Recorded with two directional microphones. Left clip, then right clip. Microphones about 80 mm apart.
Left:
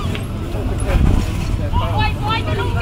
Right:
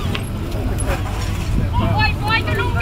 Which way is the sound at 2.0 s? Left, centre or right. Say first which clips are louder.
Right 4 dB; right.